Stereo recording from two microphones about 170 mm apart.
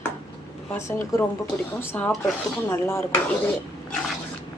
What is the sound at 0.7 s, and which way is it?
Speech, 15° left (ahead or behind).